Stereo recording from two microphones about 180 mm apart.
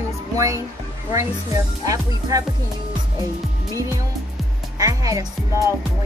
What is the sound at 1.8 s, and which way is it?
Speech, 20° right (ahead or behind).